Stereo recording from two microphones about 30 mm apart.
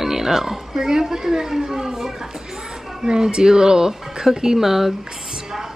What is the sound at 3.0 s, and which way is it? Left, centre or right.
A woman's voice, right.